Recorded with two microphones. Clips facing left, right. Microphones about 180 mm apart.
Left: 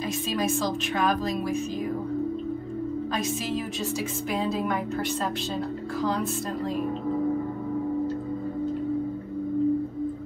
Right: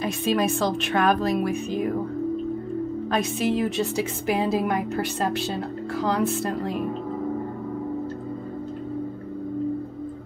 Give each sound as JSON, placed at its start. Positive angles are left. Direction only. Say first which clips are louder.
{"t": 0.3, "sound": "speech", "louder": "right 5 dB", "side_deg": -60}
{"t": 3.1, "sound": "speech", "louder": "right 5 dB", "side_deg": -60}